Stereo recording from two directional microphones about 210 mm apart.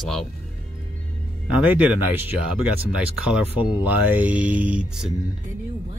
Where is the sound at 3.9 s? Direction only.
10° right (ahead or behind).